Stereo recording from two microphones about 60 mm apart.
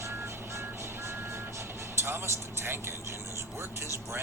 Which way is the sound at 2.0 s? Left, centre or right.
Right.